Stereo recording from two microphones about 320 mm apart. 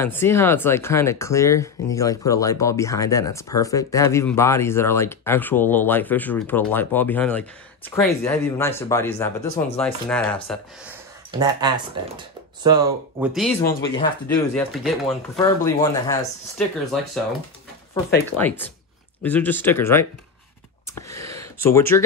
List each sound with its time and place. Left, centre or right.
0.0 s speech: centre
11.3 s speech: centre
13.3 s speech: centre
14.5 s speech: centre
15.3 s speech: centre
19.2 s speech: centre
20.9 s a sound: centre